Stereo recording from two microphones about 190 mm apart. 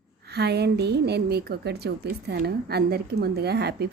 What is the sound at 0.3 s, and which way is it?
A woman's voice, 60° right (ahead or behind).